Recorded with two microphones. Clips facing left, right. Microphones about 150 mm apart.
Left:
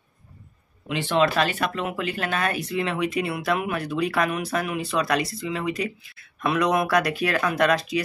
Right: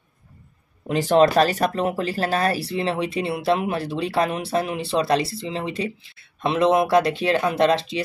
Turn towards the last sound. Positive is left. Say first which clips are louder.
# right 2 dB
turn(degrees=-25)  # may be behind; listen again after turning